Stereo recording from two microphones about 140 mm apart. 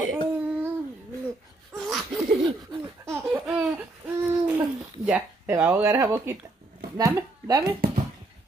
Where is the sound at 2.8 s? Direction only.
20° right (ahead or behind).